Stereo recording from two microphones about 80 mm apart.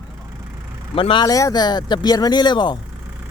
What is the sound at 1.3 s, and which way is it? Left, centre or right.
Speech, left.